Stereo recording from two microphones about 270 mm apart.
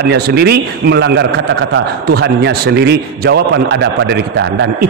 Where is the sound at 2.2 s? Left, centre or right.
Right.